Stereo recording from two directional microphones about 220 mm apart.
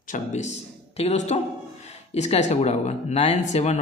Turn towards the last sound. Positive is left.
turn(degrees=30)  # may be behind; listen again after turning